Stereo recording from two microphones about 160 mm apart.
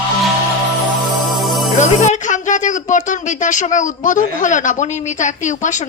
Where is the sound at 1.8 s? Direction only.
50° left (ahead or behind).